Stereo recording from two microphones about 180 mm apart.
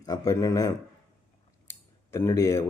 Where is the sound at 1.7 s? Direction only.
15° left (ahead or behind).